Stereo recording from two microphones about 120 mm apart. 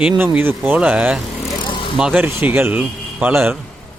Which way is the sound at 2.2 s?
20° right (ahead or behind).